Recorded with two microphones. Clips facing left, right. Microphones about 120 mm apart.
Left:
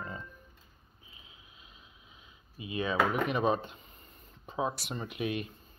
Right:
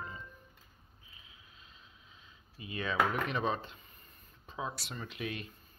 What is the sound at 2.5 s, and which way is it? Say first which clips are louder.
Speech: left 3 dB; 15° left (ahead or behind).